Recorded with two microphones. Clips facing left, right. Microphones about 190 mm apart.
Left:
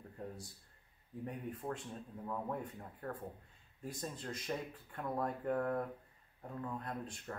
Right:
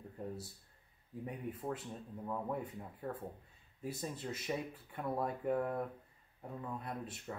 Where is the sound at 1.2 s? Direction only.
5° right (ahead or behind).